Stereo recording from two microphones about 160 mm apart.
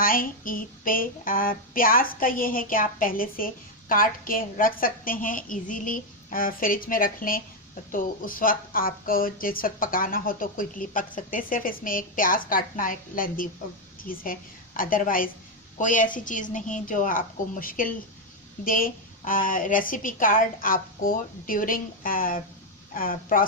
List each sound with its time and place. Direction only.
0.0 s a woman's voice: 60° left (ahead or behind)